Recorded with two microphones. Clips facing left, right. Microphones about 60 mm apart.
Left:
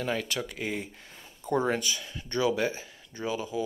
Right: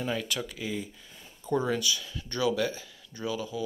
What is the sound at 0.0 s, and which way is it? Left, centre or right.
Speech, left.